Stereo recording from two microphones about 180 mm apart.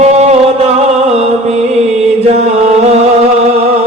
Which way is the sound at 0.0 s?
35° right (ahead or behind).